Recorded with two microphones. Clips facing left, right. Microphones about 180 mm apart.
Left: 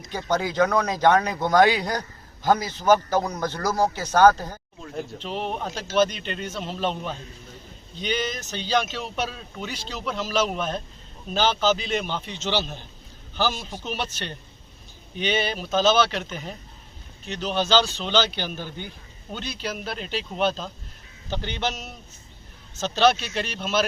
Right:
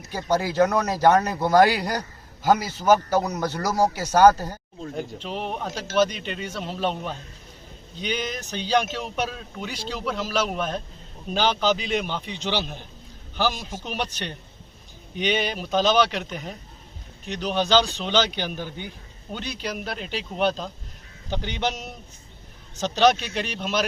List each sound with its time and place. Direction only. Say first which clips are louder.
0.0 s speech: right 1 dB; 10° right (ahead or behind)
17.2 s speech: right 1 dB; 15° right (ahead or behind)